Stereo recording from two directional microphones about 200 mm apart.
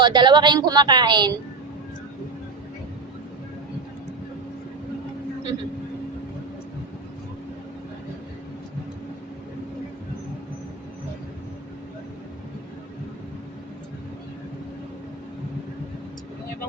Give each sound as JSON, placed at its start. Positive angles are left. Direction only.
{"t": 0.0, "sound": "a woman's voice", "side_deg": -20}